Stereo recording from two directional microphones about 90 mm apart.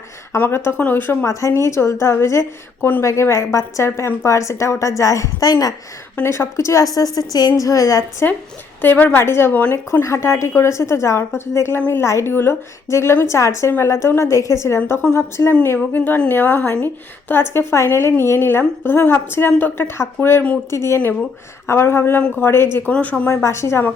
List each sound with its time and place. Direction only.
0.3 s a woman's voice: 25° left (ahead or behind)
1.3 s a woman's voice: 35° left (ahead or behind)
6.2 s a woman's voice: 30° left (ahead or behind)
6.9 s a woman's voice: 40° left (ahead or behind)
8.8 s a woman's voice: 20° left (ahead or behind)
9.7 s a woman's voice: 30° left (ahead or behind)
22.9 s speech: 15° left (ahead or behind)
23.3 s a woman's voice: 30° left (ahead or behind)